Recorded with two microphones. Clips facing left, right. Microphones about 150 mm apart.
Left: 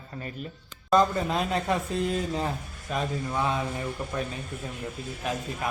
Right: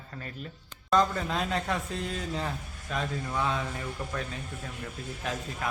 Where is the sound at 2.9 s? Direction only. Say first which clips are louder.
Left 3 dB; 20° left (ahead or behind).